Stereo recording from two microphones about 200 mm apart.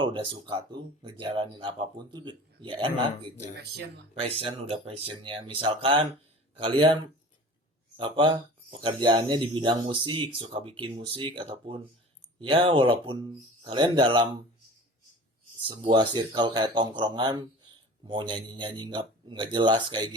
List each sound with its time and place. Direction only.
0.0 s speech: 25° right (ahead or behind)
3.5 s speech: 55° right (ahead or behind)
4.1 s speech: 30° right (ahead or behind)
15.6 s speech: 25° right (ahead or behind)